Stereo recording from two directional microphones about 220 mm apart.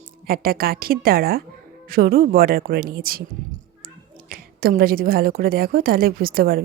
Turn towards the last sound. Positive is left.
turn(degrees=-45)  # may be behind; listen again after turning